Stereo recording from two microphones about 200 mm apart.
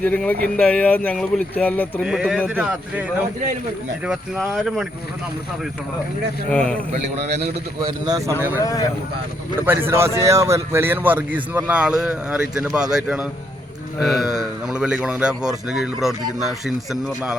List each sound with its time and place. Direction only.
0.0 s speech: 10° left (ahead or behind)
2.0 s a man's voice: 5° right (ahead or behind)
4.0 s a man's voice: centre (ahead or behind)
6.5 s a man's voice: 5° left (ahead or behind)
6.9 s a man's voice: 30° right (ahead or behind)
8.0 s a man's voice: 15° right (ahead or behind)
8.6 s speech: 15° left (ahead or behind)
9.6 s a man's voice: 10° right (ahead or behind)